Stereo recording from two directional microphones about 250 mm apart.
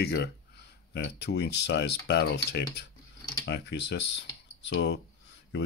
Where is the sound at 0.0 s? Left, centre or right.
Left.